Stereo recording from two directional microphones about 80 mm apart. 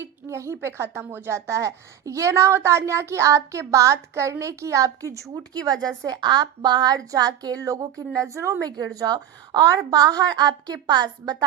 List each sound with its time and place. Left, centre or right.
0.0 s a child's voice: right
5.3 s speech: right
6.1 s a woman's voice: right